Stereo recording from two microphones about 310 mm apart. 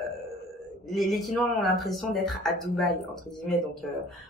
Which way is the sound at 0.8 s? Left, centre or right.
Centre.